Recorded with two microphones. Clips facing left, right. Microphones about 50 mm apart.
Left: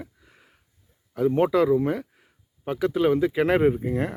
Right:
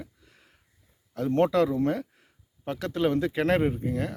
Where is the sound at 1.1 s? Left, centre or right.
Centre.